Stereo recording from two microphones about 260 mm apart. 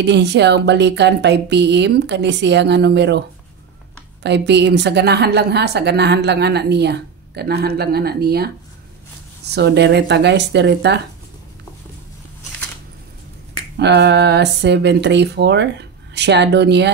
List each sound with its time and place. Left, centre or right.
0.0 s a woman's voice: right
9.5 s a woman's voice: right
13.7 s a woman's voice: right